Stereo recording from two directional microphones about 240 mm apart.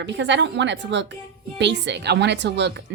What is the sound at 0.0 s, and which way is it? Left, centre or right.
Speech, right.